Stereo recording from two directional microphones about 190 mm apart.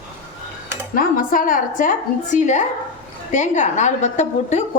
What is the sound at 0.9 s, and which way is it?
A woman's voice, 45° left (ahead or behind).